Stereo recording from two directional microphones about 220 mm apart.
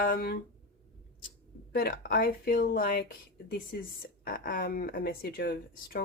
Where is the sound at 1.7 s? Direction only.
40° left (ahead or behind).